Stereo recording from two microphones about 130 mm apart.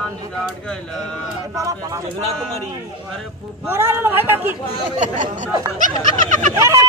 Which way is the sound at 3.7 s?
15° right (ahead or behind).